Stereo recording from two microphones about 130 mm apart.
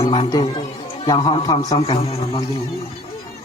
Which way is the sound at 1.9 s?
45° left (ahead or behind).